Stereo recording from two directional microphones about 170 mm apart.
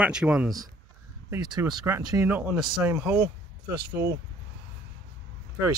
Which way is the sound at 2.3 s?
10° right (ahead or behind).